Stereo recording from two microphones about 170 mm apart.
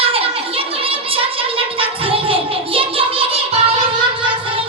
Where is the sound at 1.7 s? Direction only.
35° right (ahead or behind).